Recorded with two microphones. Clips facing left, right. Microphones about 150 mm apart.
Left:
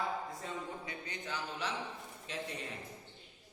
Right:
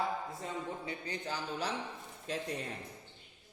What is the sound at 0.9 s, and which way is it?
A man's voice, 35° right (ahead or behind).